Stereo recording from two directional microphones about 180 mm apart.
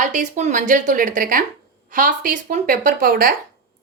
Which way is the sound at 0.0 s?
45° right (ahead or behind).